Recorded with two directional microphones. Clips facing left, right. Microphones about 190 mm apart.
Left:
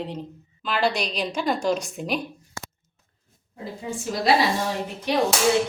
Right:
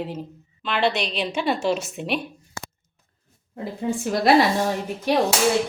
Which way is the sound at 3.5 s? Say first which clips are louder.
Right 6 dB; 60° right (ahead or behind).